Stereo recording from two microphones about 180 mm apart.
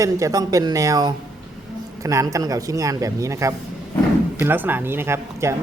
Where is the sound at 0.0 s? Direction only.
20° right (ahead or behind).